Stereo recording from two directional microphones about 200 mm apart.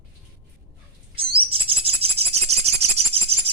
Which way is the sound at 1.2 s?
25° right (ahead or behind).